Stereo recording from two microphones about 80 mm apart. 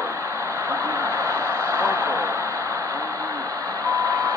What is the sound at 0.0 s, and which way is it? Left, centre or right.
Vehicle, right.